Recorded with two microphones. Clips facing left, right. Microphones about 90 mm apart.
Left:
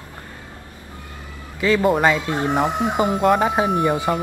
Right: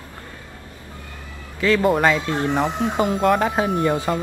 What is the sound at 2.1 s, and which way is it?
Speech, 15° left (ahead or behind).